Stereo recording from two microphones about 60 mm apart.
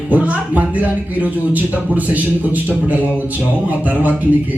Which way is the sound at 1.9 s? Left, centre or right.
Right.